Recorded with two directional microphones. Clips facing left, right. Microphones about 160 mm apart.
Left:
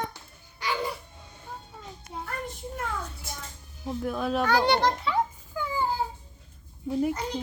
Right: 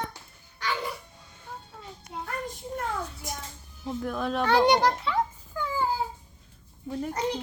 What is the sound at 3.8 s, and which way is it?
Speech, 5° left (ahead or behind).